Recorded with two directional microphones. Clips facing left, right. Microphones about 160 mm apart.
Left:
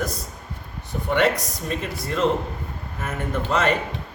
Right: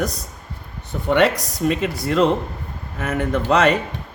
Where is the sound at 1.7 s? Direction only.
90° right.